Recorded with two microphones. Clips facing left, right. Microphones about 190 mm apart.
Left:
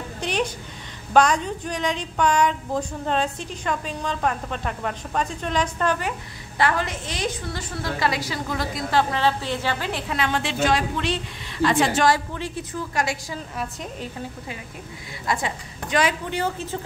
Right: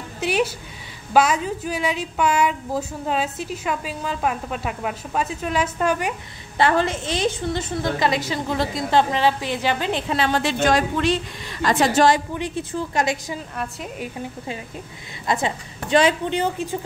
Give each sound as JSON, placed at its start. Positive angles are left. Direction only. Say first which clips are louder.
{"t": 0.2, "sound": "a woman's voice", "louder": "right 4 dB", "side_deg": -5}
{"t": 6.6, "sound": "a woman's voice", "louder": "right 4 dB", "side_deg": -25}
{"t": 12.1, "sound": "a woman's voice", "louder": "right 2 dB", "side_deg": -20}
{"t": 15.2, "sound": "a woman's voice", "louder": "right 3 dB", "side_deg": -25}